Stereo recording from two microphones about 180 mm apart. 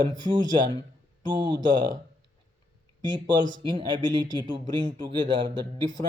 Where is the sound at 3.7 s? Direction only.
25° right (ahead or behind).